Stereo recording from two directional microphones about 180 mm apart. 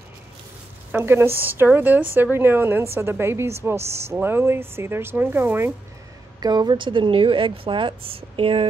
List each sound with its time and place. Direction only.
0.9 s a woman's voice: 10° right (ahead or behind)
6.4 s a woman's voice: 25° right (ahead or behind)